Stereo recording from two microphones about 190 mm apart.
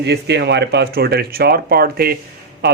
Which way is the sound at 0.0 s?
65° right (ahead or behind).